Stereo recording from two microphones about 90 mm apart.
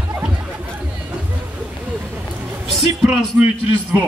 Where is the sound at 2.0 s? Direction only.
10° right (ahead or behind).